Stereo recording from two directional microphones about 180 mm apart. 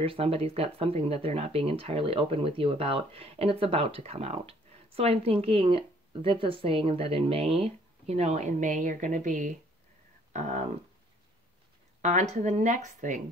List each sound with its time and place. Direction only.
0.0 s speech: 30° right (ahead or behind)
12.0 s speech: 40° right (ahead or behind)